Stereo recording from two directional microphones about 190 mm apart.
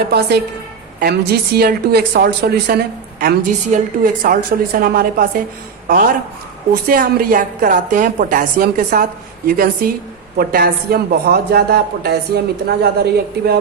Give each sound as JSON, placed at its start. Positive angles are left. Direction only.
{"t": 0.0, "sound": "a woman's voice", "side_deg": -60}